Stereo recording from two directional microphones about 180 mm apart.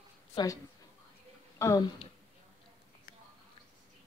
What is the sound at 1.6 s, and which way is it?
Speech, 15° left (ahead or behind).